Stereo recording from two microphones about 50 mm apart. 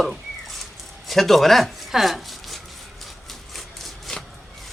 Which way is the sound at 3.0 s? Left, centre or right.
Centre.